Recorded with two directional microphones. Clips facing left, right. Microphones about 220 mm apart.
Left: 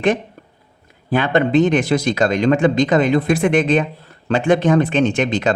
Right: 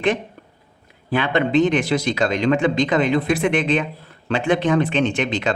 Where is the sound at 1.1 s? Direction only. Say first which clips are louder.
Left 3 dB; 45° left (ahead or behind).